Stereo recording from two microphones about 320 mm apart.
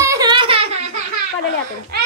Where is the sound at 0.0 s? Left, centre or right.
Centre.